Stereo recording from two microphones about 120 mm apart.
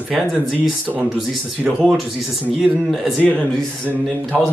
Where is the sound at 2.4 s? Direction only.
5° right (ahead or behind).